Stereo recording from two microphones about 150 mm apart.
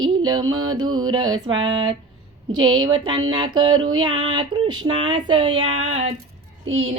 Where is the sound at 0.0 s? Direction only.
30° right (ahead or behind).